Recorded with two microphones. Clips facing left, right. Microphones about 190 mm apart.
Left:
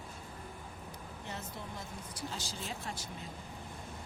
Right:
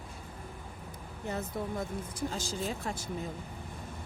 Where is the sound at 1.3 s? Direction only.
55° right (ahead or behind).